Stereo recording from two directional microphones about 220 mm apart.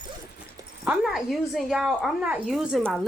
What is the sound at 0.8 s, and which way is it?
Speech, centre (ahead or behind).